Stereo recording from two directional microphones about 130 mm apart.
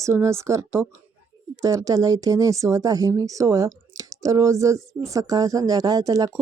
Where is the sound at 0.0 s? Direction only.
20° right (ahead or behind).